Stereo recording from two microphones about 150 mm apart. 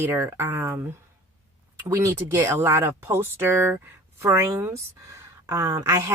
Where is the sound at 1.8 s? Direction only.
20° right (ahead or behind).